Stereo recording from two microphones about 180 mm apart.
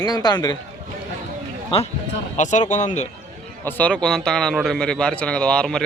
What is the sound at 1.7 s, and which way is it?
Speech, 30° left (ahead or behind).